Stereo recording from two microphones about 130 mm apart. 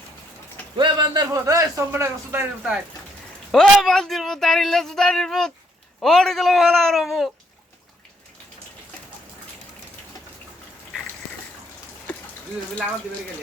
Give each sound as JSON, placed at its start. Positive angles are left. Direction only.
{"t": 0.8, "sound": "a man's voice", "side_deg": -35}
{"t": 3.5, "sound": "speech", "side_deg": 0}